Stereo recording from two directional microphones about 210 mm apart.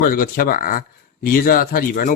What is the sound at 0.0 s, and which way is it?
Speech, 40° left (ahead or behind).